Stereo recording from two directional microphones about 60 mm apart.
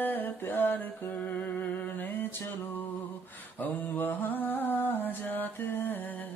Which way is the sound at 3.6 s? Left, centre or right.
Left.